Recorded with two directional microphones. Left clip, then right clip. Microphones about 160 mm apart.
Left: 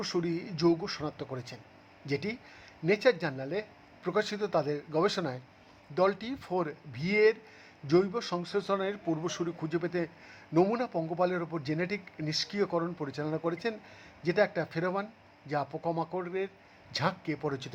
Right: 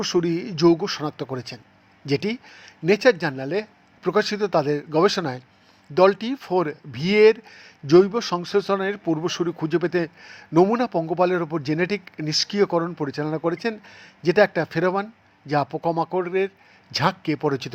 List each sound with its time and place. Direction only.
0.0 s speech: 25° right (ahead or behind)